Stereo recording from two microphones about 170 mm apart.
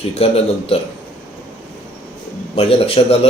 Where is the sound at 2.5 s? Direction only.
35° left (ahead or behind).